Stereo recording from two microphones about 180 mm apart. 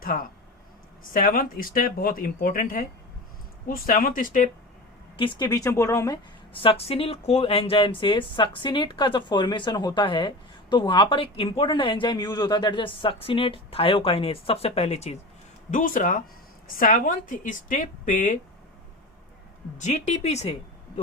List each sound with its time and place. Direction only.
0.1 s speech: 50° left (ahead or behind)
5.1 s speech: 25° left (ahead or behind)
6.5 s speech: 30° left (ahead or behind)
15.7 s speech: 45° left (ahead or behind)
19.8 s speech: 40° left (ahead or behind)